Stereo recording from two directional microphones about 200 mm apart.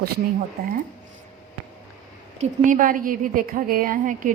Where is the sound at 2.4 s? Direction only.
40° right (ahead or behind).